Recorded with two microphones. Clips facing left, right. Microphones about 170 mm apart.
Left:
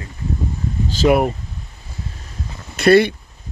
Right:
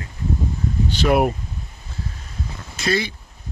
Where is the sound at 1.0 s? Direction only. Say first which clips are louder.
Left 4 dB; 20° left (ahead or behind).